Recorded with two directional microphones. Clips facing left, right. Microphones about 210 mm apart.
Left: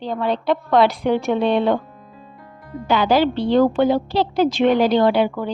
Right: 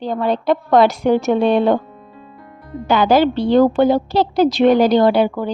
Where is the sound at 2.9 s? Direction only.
45° right (ahead or behind).